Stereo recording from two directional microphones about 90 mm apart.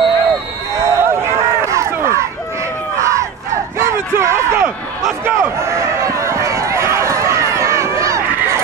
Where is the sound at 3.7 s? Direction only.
30° right (ahead or behind).